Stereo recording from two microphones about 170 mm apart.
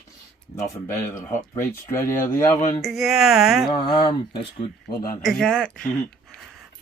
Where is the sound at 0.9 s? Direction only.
15° left (ahead or behind).